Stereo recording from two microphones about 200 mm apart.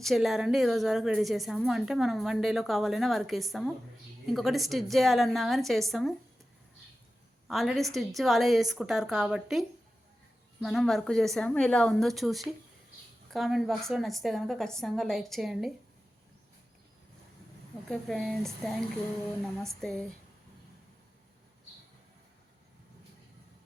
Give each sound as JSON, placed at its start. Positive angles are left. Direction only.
{"t": 0.0, "sound": "a woman's voice", "side_deg": 0}
{"t": 7.4, "sound": "a woman's voice", "side_deg": 0}
{"t": 17.8, "sound": "a woman's voice", "side_deg": 0}